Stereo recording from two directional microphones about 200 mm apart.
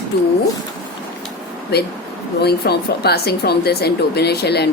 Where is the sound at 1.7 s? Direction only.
55° left (ahead or behind).